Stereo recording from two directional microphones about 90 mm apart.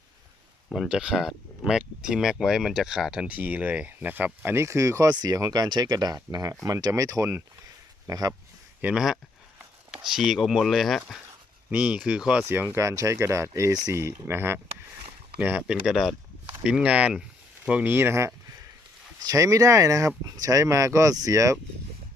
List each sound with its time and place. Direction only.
0.7 s speech: 5° right (ahead or behind); by 5.1 s 40° right (ahead or behind)
5.1 s speech: 50° right (ahead or behind); by 7.4 s 35° right (ahead or behind)
8.0 s speech: 45° right (ahead or behind)
8.8 s speech: 10° right (ahead or behind)
11.7 s speech: 15° right (ahead or behind)
12.5 s speech: 25° right (ahead or behind)
15.6 s speech: 5° right (ahead or behind)
17.9 s speech: 30° right (ahead or behind)
19.3 s speech: 40° right (ahead or behind)